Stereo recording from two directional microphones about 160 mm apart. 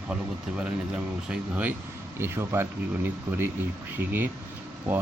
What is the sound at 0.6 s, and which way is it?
Speech, 5° right (ahead or behind).